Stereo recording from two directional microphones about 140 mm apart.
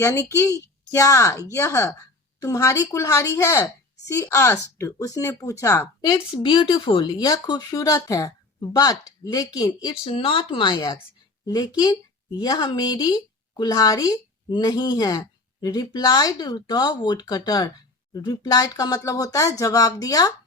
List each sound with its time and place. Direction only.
0.0 s a woman's voice: 25° left (ahead or behind)